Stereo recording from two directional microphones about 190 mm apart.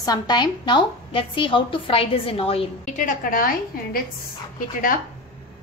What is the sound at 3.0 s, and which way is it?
A woman's voice, 45° left (ahead or behind).